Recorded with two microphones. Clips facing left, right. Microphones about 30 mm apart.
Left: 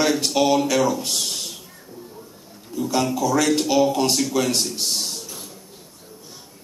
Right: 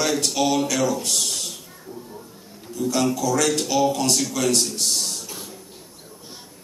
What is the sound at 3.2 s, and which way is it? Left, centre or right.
Speech, centre.